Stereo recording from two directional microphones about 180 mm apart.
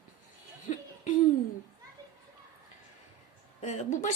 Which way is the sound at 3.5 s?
40° left (ahead or behind).